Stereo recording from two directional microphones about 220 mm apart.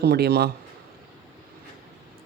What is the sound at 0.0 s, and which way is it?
Speech, 45° right (ahead or behind).